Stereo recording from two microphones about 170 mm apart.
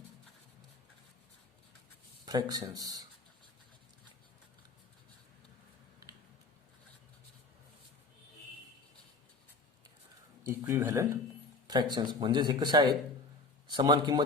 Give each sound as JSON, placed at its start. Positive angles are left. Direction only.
{"t": 2.2, "sound": "speech", "side_deg": -25}
{"t": 10.4, "sound": "speech", "side_deg": -15}
{"t": 11.7, "sound": "speech", "side_deg": -25}